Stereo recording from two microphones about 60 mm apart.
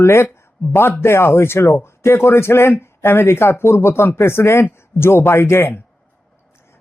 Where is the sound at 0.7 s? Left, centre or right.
Left.